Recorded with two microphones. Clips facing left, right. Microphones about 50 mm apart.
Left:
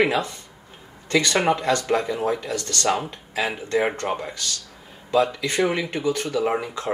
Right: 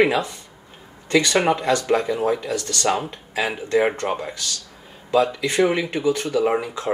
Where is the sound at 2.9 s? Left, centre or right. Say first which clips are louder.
Right 1 dB; centre.